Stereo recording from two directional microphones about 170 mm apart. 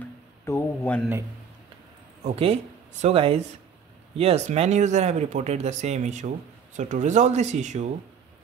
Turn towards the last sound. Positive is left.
turn(degrees=-45)  # may be behind; listen again after turning